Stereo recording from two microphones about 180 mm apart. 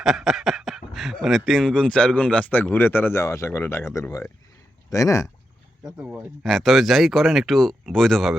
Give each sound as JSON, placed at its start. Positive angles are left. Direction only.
{"t": 0.0, "sound": "speech", "side_deg": 0}
{"t": 5.8, "sound": "speech", "side_deg": -5}